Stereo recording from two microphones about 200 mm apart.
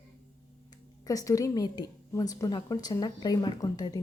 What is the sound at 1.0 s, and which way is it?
A woman's voice, 15° left (ahead or behind).